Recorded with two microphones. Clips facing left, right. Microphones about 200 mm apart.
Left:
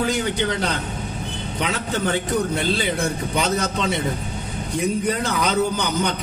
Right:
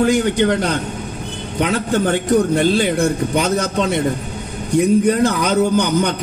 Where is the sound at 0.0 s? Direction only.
50° right (ahead or behind).